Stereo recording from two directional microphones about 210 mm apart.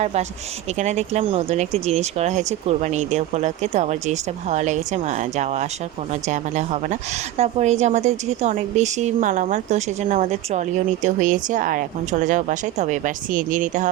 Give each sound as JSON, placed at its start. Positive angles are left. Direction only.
{"t": 0.0, "sound": "a woman's voice", "side_deg": -30}